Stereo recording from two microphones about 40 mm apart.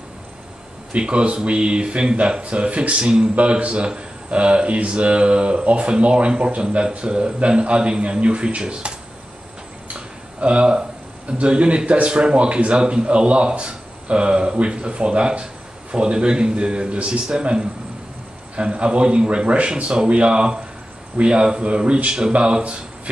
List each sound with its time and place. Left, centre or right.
0.9 s speech: right
3.3 s speech: right
9.8 s a sound: right
11.3 s speech: right
19.7 s speech: right